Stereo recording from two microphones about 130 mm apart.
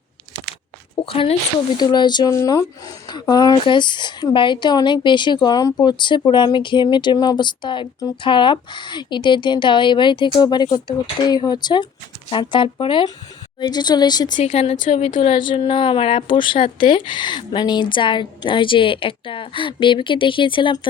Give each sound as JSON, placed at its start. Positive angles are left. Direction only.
{"t": 1.0, "sound": "speech", "side_deg": 45}
{"t": 1.8, "sound": "speech", "side_deg": 35}
{"t": 14.3, "sound": "speech", "side_deg": 85}
{"t": 14.5, "sound": "speech", "side_deg": 50}
{"t": 15.2, "sound": "speech", "side_deg": 40}